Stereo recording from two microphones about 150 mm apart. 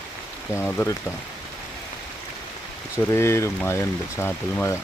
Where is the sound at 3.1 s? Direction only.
15° left (ahead or behind).